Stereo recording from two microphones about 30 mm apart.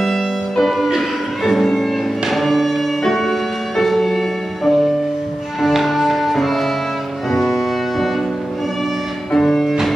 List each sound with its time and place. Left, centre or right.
0.0 s music: centre
9.3 s music: centre